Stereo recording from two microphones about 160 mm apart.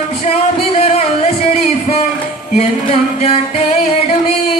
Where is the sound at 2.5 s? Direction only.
35° left (ahead or behind).